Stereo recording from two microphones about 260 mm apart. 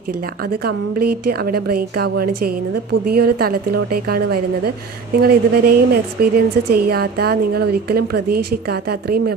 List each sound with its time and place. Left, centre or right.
0.5 s a woman's voice: right